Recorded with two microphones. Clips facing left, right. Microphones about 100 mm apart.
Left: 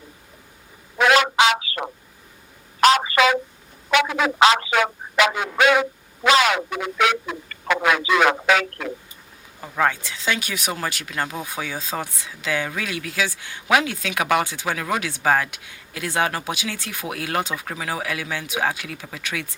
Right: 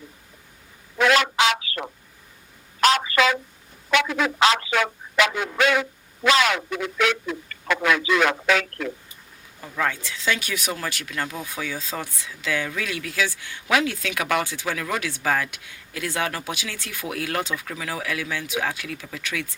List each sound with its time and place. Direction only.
0.9 s telephone: 15° left (ahead or behind)
2.8 s a sound: 15° left (ahead or behind)
3.8 s speech: 20° left (ahead or behind)
9.9 s speech: 20° left (ahead or behind)
12.5 s speech: 35° left (ahead or behind)